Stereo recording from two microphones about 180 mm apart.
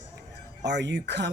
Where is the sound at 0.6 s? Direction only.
70° right (ahead or behind).